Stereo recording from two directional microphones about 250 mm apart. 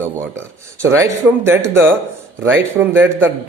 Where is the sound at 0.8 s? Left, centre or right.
Centre.